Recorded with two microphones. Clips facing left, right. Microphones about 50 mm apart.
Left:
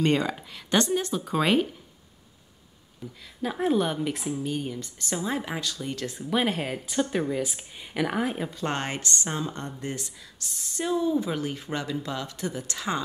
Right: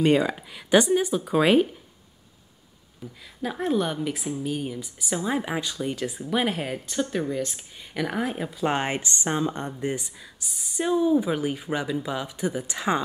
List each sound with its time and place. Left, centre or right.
0.0 s speech: centre
3.0 s speech: centre